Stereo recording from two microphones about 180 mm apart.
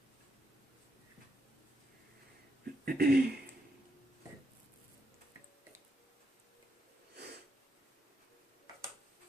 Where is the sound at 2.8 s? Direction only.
60° right (ahead or behind).